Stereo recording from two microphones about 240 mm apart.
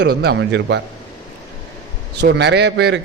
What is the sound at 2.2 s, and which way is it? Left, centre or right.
Speech, right.